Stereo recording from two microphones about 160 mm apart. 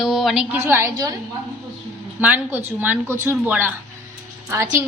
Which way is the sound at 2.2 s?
10° right (ahead or behind).